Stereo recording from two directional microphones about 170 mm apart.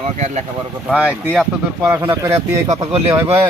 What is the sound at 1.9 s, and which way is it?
Speech, 15° right (ahead or behind).